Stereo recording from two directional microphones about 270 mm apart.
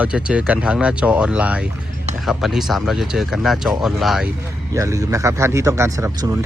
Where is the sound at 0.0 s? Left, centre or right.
Centre.